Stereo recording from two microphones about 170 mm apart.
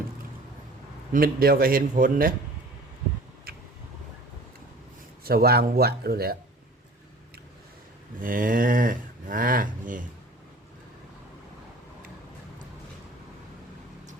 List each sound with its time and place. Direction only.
1.1 s a man's voice: 60° right (ahead or behind)
3.5 s a sound: 60° right (ahead or behind)
5.2 s a man's voice: 65° right (ahead or behind)
8.2 s speech: 55° right (ahead or behind)